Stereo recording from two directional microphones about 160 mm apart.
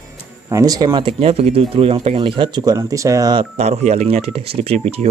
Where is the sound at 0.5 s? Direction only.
20° right (ahead or behind).